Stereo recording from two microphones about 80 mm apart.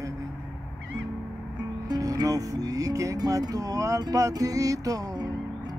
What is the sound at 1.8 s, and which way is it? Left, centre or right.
Music, right.